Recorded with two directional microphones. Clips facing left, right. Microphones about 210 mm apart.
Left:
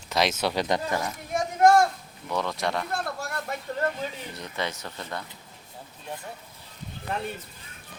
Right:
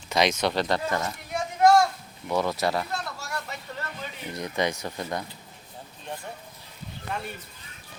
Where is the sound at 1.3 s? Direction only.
45° left (ahead or behind).